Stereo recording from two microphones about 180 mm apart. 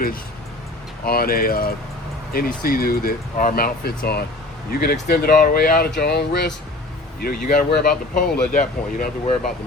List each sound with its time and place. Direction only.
1.0 s speech: 55° left (ahead or behind)